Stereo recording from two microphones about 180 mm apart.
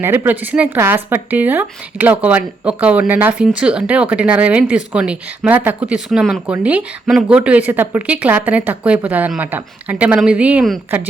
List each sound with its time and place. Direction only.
0.0 s speech: 10° right (ahead or behind)